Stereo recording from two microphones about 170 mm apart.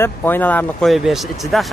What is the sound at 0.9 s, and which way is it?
Speech, centre (ahead or behind).